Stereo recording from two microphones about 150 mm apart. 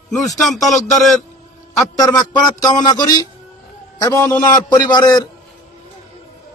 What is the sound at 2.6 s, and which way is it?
A man's voice, 25° left (ahead or behind).